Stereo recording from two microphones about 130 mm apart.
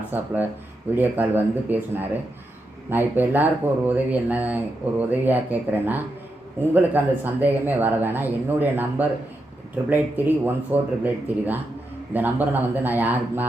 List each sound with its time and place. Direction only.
0.1 s speech: 15° right (ahead or behind)